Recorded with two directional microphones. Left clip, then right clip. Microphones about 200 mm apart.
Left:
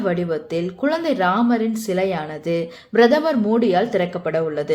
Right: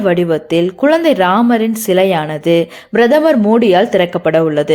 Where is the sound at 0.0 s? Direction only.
30° right (ahead or behind).